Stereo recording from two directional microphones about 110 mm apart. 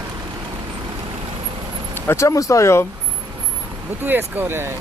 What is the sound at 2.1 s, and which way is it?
Speech, 30° left (ahead or behind).